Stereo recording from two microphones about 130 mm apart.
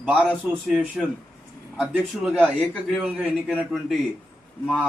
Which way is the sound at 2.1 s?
10° right (ahead or behind).